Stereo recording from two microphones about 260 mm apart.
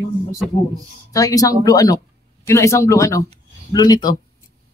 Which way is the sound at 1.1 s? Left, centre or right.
Centre.